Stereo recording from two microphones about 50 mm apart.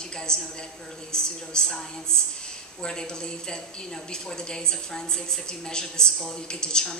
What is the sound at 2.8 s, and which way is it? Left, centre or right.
A woman's voice, centre.